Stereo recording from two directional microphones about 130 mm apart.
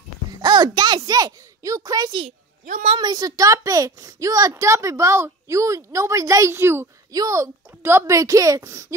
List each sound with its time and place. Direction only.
0.4 s a child's voice: 30° right (ahead or behind)
2.2 s a woman's voice: 75° right (ahead or behind)
3.0 s a child's voice: 30° right (ahead or behind)